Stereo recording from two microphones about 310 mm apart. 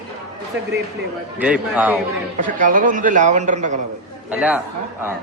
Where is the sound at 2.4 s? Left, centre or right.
Right.